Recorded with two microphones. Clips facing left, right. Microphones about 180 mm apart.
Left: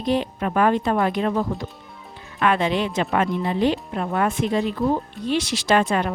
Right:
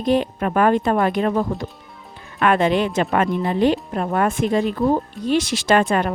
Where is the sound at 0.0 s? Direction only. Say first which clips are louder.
Right 3 dB; 50° right (ahead or behind).